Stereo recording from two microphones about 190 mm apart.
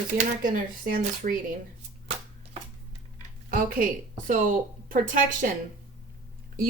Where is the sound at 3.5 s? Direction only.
50° right (ahead or behind).